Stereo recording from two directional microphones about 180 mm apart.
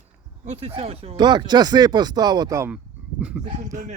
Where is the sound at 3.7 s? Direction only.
45° right (ahead or behind).